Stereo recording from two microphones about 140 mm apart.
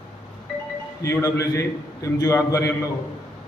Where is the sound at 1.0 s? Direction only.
20° left (ahead or behind).